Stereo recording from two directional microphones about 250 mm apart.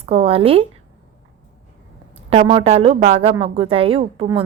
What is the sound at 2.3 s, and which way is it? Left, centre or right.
A woman's voice, right.